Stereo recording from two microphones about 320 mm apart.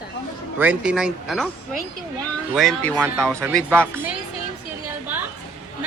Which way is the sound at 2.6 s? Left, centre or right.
Centre.